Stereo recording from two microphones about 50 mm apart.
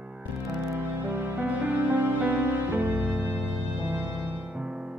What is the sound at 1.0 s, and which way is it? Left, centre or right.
Music, right.